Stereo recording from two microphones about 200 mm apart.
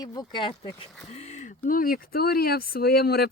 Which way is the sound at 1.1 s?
35° left (ahead or behind).